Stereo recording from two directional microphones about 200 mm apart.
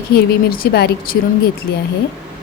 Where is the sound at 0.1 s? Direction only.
50° left (ahead or behind).